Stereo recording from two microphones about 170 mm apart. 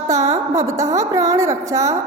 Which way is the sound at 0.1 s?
20° right (ahead or behind).